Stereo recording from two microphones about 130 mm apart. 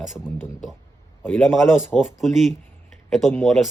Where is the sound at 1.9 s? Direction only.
Centre (ahead or behind).